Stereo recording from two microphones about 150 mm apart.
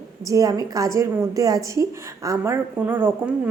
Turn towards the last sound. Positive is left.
turn(degrees=-15)  # may be behind; listen again after turning